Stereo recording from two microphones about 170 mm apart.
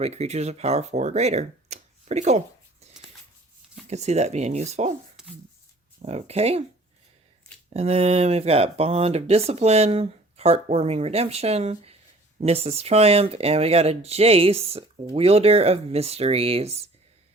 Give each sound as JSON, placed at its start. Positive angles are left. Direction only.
{"t": 0.0, "sound": "speech", "side_deg": -40}
{"t": 2.8, "sound": "a sound", "side_deg": -40}
{"t": 3.8, "sound": "speech", "side_deg": -40}
{"t": 6.0, "sound": "speech", "side_deg": -40}
{"t": 7.7, "sound": "speech", "side_deg": -40}